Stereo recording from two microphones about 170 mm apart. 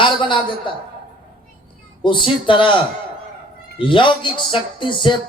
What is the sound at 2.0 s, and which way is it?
A man's voice, 30° left (ahead or behind).